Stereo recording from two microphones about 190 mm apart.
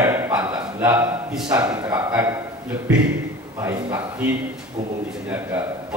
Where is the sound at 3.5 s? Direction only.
10° right (ahead or behind).